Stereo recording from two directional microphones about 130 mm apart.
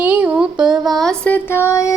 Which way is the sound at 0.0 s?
15° right (ahead or behind).